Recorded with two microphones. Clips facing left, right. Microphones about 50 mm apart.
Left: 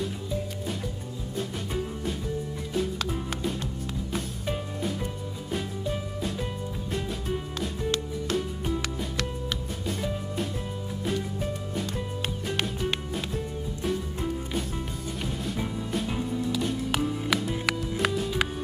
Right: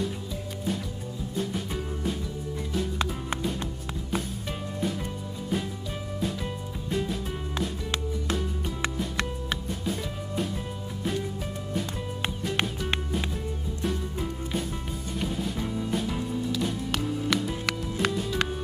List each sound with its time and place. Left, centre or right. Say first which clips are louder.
7.5 s music: right 1 dB; centre
16.5 s music: left 1 dB; centre